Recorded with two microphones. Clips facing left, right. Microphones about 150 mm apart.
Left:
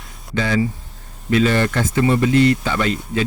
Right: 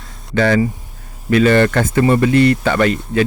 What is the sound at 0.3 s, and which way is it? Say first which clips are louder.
Speech: right 5 dB; 65° right (ahead or behind).